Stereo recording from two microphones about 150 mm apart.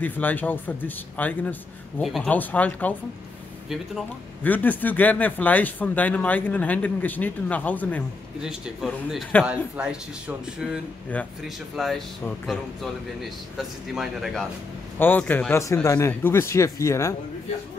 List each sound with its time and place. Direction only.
0.0 s speech: 10° left (ahead or behind)
2.0 s speech: centre (ahead or behind)
3.6 s speech: centre (ahead or behind)
4.4 s speech: 10° left (ahead or behind)
8.4 s speech: 5° right (ahead or behind)
15.0 s a man's voice: 10° left (ahead or behind)